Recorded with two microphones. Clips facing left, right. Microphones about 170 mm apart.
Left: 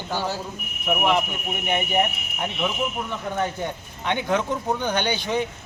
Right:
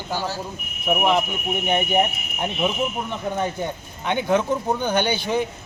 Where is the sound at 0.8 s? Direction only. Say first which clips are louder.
Right 2 dB; 15° right (ahead or behind).